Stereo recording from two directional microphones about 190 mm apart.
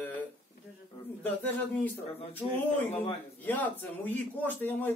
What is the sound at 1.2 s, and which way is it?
Speech, 10° left (ahead or behind).